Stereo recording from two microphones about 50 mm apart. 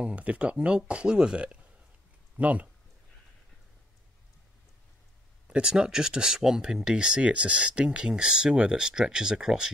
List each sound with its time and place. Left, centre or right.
0.0 s speech: right
2.3 s speech: right
5.5 s speech: centre